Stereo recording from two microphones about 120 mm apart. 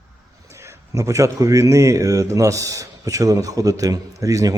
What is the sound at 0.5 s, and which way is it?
A man's voice, 25° right (ahead or behind).